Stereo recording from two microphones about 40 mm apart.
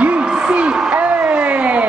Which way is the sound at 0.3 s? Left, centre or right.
Centre.